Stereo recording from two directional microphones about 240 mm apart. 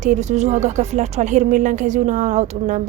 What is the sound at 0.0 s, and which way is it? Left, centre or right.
A woman's voice, right.